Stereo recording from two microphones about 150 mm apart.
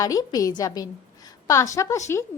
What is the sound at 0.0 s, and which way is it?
A woman's voice, 25° left (ahead or behind).